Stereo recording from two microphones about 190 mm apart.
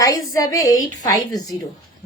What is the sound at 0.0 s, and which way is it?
A woman's voice, 15° left (ahead or behind).